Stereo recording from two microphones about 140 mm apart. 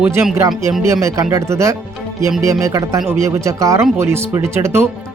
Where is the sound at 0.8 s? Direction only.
20° right (ahead or behind).